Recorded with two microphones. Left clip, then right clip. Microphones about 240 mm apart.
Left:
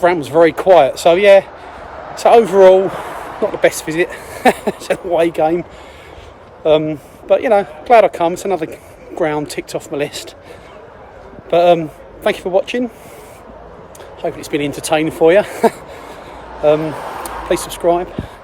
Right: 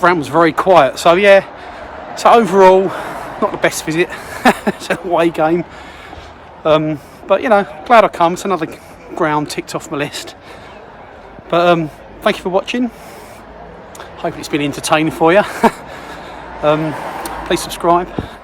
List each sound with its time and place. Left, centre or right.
0.0 s speech: centre
2.7 s speech: right
3.6 s speech: centre
6.7 s speech: centre
11.5 s a man's voice: centre
14.2 s speech: centre
16.8 s a sound: right
17.8 s speech: centre